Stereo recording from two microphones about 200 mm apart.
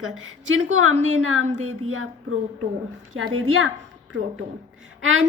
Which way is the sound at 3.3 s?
90° right.